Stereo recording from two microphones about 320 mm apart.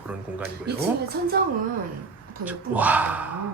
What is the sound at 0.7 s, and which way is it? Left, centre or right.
Speech, right.